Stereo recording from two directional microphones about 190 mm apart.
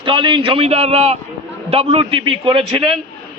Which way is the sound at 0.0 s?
25° right (ahead or behind).